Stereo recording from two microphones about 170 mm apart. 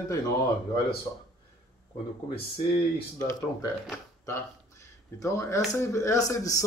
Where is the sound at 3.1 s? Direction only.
20° left (ahead or behind).